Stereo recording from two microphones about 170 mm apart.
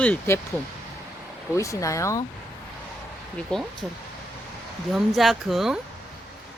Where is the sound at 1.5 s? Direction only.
20° left (ahead or behind).